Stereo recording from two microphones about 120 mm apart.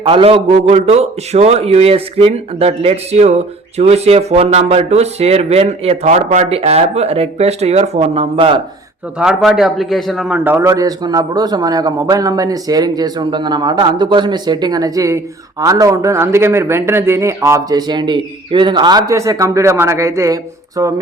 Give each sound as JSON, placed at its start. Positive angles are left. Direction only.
{"t": 0.0, "sound": "speech", "side_deg": -50}
{"t": 9.1, "sound": "a man's voice", "side_deg": -5}
{"t": 10.3, "sound": "speech", "side_deg": -15}
{"t": 10.6, "sound": "a man's voice", "side_deg": -30}